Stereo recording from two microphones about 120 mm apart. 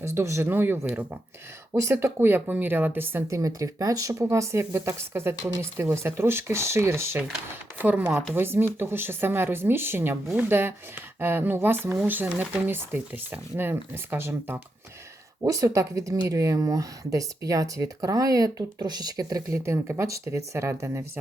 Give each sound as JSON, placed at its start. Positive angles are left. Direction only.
{"t": 0.0, "sound": "speech", "side_deg": -25}